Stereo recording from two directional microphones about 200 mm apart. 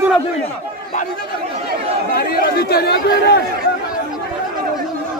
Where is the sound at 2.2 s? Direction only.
50° left (ahead or behind).